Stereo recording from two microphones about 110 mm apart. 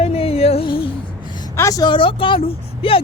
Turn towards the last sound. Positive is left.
turn(degrees=55)  # may be behind; listen again after turning